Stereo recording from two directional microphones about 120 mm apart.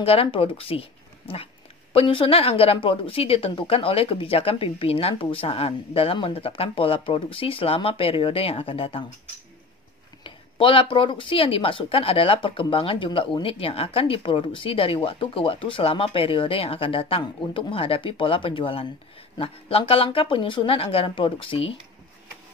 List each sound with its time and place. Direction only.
0.0 s speech: 50° left (ahead or behind)
10.2 s speech: 45° left (ahead or behind)